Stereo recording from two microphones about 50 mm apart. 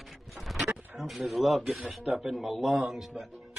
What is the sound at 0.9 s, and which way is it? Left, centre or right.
Speech, centre.